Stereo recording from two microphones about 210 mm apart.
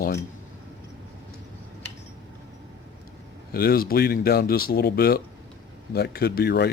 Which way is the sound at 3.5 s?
45° left (ahead or behind).